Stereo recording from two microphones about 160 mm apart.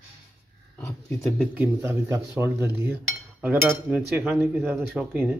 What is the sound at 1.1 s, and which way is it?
Speech, 15° left (ahead or behind).